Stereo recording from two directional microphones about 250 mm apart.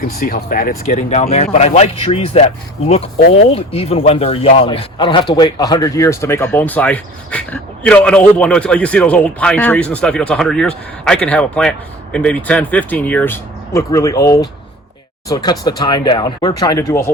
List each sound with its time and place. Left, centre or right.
0.2 s speech: left; by 17.0 s centre